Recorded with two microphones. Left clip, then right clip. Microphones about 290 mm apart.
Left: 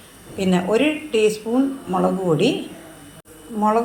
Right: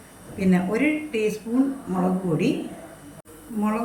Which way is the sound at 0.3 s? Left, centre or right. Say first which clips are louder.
Left 5 dB; left.